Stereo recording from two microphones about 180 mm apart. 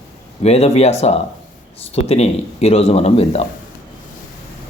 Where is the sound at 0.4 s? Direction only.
35° left (ahead or behind).